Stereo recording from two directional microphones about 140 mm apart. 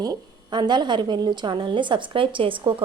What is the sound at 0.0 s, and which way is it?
A woman's voice, 30° right (ahead or behind).